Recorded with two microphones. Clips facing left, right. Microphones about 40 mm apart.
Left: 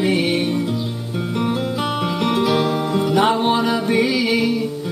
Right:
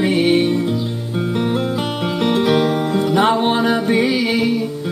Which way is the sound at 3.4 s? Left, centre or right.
Right.